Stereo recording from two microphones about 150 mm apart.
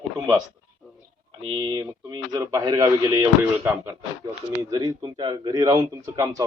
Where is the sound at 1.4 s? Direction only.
35° right (ahead or behind).